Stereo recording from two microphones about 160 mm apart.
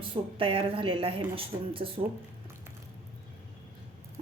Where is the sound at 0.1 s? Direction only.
35° right (ahead or behind).